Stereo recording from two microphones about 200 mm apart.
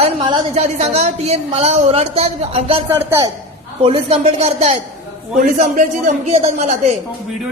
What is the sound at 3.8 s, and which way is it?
A woman's voice, 30° right (ahead or behind).